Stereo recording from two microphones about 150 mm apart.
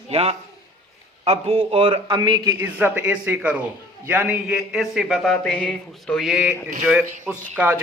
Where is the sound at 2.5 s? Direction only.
15° right (ahead or behind).